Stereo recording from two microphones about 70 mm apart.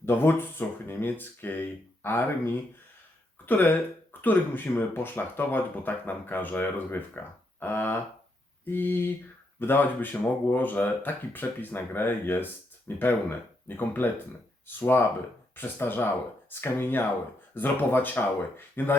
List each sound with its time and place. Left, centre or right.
0.0 s speech: left